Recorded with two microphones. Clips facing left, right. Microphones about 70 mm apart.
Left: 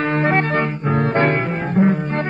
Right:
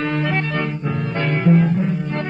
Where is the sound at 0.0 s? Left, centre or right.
Left.